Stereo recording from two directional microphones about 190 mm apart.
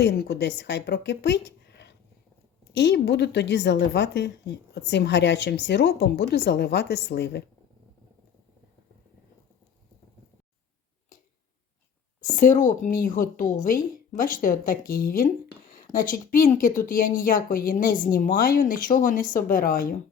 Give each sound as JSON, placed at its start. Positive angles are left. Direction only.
{"t": 0.0, "sound": "a woman's voice", "side_deg": 60}
{"t": 12.4, "sound": "speech", "side_deg": 45}